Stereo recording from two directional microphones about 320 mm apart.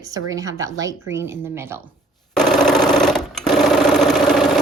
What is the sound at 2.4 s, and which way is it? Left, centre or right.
Sewing machine, centre.